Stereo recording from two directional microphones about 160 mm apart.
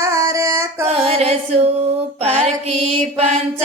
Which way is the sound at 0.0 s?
20° right (ahead or behind).